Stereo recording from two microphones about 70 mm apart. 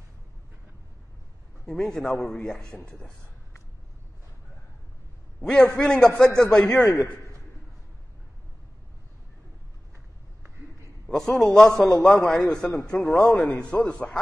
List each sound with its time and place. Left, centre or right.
1.7 s a man's voice: centre
5.4 s a man's voice: centre
11.1 s a man's voice: centre